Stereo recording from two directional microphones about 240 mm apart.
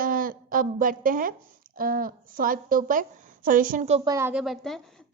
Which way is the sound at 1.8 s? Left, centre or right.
Right.